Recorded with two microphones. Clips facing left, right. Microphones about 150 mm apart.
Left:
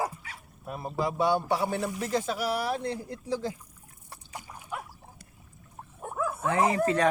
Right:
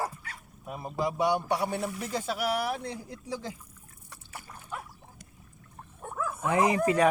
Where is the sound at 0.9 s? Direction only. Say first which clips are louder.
Left 1 dB; 20° right (ahead or behind).